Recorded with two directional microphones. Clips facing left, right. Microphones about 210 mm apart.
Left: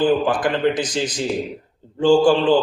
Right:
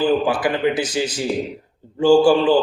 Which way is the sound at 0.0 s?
10° right (ahead or behind).